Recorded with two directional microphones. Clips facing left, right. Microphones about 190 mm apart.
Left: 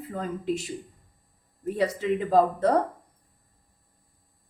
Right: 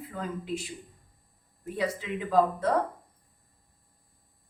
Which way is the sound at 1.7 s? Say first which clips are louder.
Left 5 dB; 40° left (ahead or behind).